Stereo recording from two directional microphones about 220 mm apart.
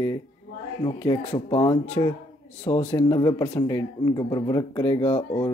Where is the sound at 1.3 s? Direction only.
20° left (ahead or behind).